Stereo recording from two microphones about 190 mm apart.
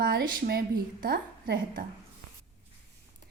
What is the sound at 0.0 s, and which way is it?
A woman's voice, 50° right (ahead or behind).